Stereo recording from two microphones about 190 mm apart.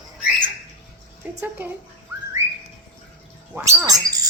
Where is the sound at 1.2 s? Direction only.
10° right (ahead or behind).